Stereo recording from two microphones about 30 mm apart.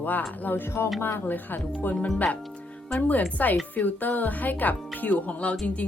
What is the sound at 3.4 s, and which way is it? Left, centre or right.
Speech, left.